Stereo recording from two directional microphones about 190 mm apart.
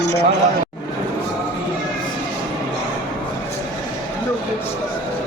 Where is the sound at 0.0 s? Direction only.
60° left (ahead or behind).